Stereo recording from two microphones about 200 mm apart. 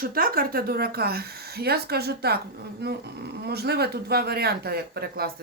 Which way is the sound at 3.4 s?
55° right (ahead or behind).